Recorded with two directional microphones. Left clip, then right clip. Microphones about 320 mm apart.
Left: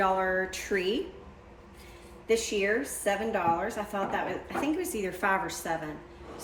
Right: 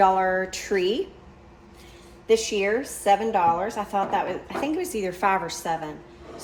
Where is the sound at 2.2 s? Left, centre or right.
Centre.